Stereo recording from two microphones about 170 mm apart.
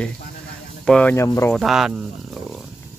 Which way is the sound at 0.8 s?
10° left (ahead or behind).